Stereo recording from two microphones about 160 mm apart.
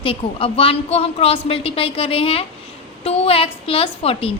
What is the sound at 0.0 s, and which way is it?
A woman's voice, 35° left (ahead or behind).